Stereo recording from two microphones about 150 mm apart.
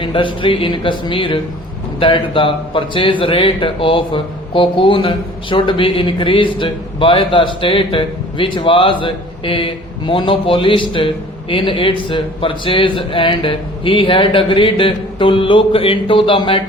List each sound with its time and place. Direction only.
0.0 s speech: 35° left (ahead or behind)